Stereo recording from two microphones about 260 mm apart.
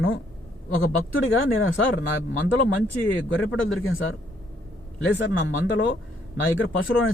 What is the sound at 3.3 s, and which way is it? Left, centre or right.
Speech, left.